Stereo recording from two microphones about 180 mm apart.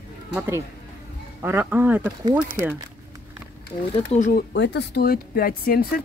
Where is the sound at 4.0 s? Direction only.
45° left (ahead or behind).